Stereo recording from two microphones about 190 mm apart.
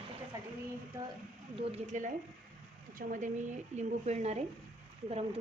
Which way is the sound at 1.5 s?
35° right (ahead or behind).